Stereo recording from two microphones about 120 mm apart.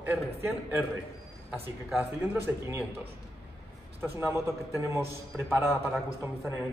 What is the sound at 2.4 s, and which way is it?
Speech, 20° right (ahead or behind).